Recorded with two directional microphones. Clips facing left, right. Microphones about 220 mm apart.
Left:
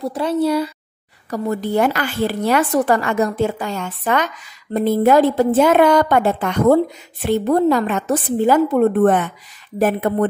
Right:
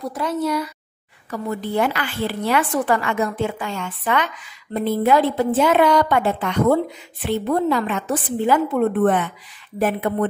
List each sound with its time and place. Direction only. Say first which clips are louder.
0.0 s speech: left 5 dB; 30° left (ahead or behind)
1.3 s a woman's voice: left 4 dB; 40° left (ahead or behind)